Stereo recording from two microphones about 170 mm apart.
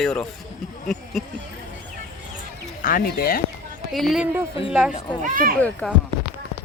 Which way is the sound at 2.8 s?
55° left (ahead or behind).